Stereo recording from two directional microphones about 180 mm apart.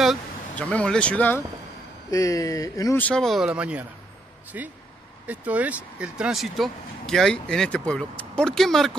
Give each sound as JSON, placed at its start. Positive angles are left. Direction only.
{"t": 0.0, "sound": "speech", "side_deg": 5}